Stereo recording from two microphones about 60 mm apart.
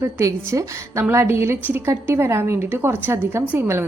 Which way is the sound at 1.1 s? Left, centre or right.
Right.